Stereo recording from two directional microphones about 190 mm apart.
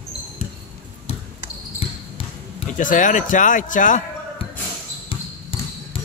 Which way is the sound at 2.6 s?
40° left (ahead or behind).